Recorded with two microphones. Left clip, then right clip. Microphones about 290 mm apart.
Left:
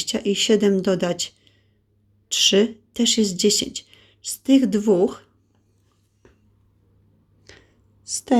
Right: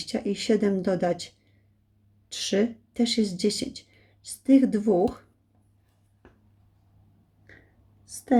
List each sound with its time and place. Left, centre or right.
0.0 s speech: centre
2.3 s speech: centre
8.0 s a woman's voice: centre